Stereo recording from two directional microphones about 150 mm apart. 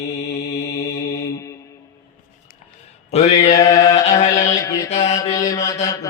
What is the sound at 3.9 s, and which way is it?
Mantra, 45° left (ahead or behind).